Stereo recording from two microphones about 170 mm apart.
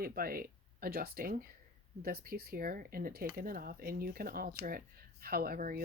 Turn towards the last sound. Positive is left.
turn(degrees=-55)  # may be behind; listen again after turning